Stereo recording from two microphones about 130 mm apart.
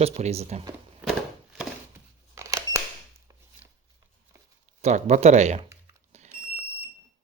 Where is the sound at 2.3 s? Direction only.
25° right (ahead or behind).